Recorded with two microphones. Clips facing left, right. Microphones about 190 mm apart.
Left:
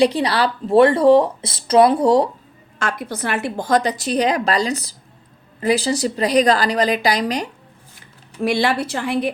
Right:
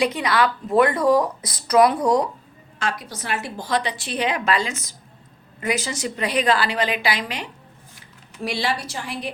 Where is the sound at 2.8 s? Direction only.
55° left (ahead or behind).